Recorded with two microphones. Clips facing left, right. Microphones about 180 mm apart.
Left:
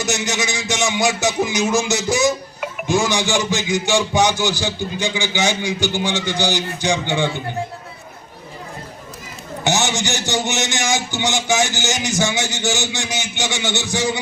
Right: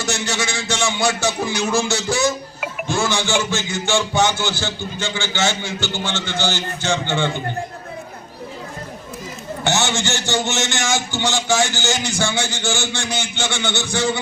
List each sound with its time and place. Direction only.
0.0 s a man's voice: 20° left (ahead or behind)
9.6 s a man's voice: 15° left (ahead or behind)